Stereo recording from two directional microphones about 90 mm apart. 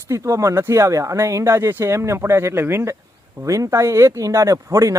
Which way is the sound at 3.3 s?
35° right (ahead or behind).